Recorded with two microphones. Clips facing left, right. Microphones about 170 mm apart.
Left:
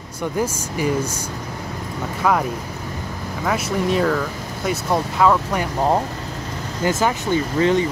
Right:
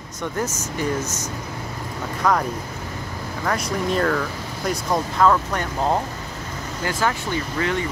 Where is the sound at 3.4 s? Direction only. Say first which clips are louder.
Left 3 dB; 5° left (ahead or behind).